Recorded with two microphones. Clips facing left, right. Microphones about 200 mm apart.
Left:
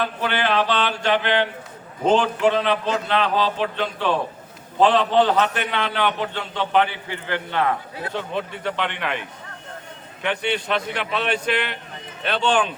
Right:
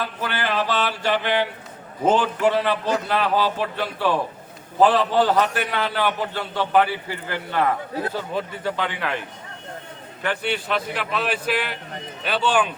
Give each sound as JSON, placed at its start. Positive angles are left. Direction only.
{"t": 0.0, "sound": "a man's voice", "side_deg": -5}
{"t": 10.2, "sound": "a man's voice", "side_deg": 0}